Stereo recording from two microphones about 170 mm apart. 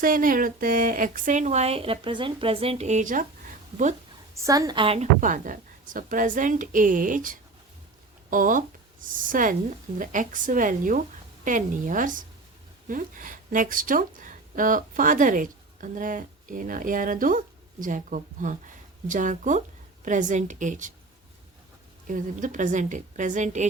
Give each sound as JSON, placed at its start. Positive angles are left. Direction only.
{"t": 0.0, "sound": "speech", "side_deg": -55}
{"t": 4.4, "sound": "a woman's voice", "side_deg": -20}
{"t": 5.2, "sound": "speech", "side_deg": -50}
{"t": 22.0, "sound": "speech", "side_deg": -50}